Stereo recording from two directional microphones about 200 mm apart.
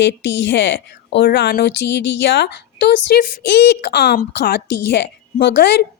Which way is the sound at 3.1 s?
50° left (ahead or behind).